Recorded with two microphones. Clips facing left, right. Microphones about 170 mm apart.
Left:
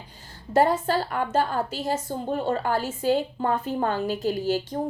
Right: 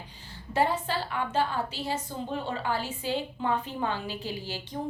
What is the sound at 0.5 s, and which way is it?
A woman's voice, 45° left (ahead or behind).